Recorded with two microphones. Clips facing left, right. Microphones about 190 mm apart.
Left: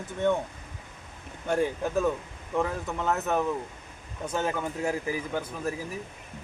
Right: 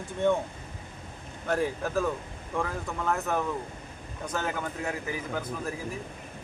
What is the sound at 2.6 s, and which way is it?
Speech, 20° left (ahead or behind).